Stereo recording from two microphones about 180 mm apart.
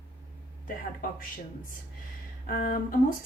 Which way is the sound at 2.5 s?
50° left (ahead or behind).